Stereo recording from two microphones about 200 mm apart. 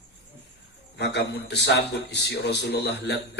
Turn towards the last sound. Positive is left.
turn(degrees=60)  # may be behind; listen again after turning